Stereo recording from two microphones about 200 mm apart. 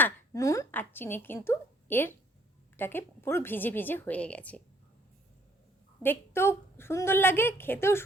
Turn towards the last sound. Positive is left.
turn(degrees=10)  # may be behind; listen again after turning